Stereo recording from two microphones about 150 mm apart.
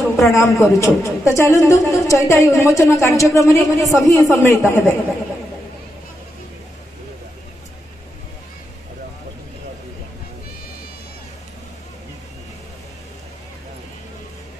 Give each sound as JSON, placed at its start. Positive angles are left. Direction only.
{"t": 0.3, "sound": "a man's voice", "side_deg": 20}